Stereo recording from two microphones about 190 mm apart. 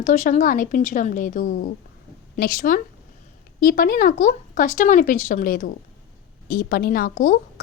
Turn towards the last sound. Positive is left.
turn(degrees=50)  # may be behind; listen again after turning